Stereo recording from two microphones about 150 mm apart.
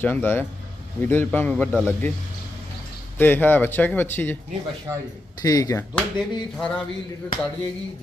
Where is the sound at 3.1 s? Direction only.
15° left (ahead or behind).